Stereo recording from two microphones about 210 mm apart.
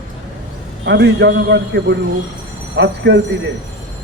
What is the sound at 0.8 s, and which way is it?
Speech, 55° right (ahead or behind).